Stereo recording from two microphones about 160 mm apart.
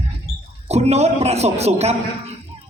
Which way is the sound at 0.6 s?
40° right (ahead or behind).